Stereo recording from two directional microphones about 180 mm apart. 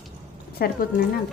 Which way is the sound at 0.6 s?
55° left (ahead or behind).